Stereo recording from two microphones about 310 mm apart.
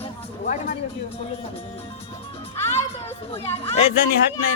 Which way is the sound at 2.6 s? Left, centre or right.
Centre.